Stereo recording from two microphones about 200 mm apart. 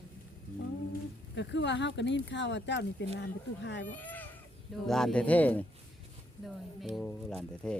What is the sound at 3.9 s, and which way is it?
Sheep, 10° left (ahead or behind).